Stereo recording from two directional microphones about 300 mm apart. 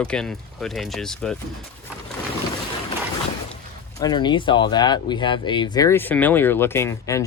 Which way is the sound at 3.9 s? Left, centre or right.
Centre.